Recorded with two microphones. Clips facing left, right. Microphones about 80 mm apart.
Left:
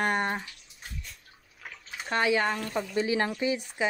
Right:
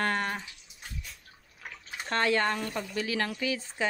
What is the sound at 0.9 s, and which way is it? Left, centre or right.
Bathtub, centre.